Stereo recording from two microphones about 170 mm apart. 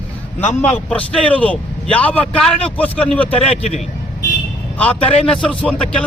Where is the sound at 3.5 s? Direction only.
40° left (ahead or behind).